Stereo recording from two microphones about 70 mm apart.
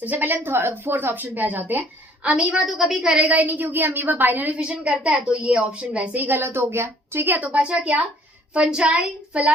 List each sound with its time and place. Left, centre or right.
0.0 s a woman's voice: right
2.2 s a woman's voice: centre
3.2 s a woman's voice: right
6.2 s a woman's voice: right
7.3 s a woman's voice: centre